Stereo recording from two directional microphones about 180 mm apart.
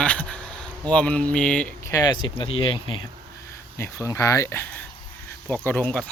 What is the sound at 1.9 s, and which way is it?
Speech, 20° left (ahead or behind).